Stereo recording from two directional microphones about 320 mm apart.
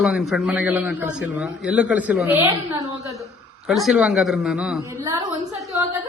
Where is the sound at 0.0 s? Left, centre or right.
Centre.